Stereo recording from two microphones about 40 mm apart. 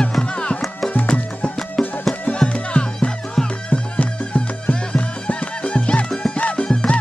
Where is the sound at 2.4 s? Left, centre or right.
Left.